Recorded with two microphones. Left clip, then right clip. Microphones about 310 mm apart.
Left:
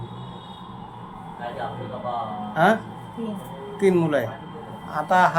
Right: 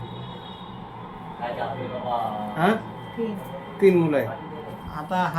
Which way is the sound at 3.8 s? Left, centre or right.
Centre.